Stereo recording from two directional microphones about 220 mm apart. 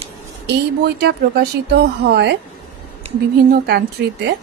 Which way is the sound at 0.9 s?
50° right (ahead or behind).